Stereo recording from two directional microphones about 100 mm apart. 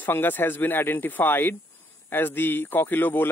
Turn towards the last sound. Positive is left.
turn(degrees=20)  # may be behind; listen again after turning